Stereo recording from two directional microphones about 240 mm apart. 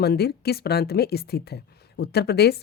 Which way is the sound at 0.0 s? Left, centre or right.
Left.